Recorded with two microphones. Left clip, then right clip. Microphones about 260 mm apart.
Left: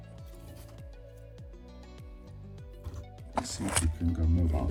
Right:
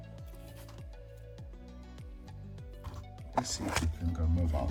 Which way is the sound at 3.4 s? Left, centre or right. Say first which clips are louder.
Left 1 dB; right.